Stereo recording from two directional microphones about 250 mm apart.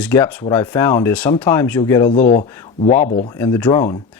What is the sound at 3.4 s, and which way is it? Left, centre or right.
Speech, centre.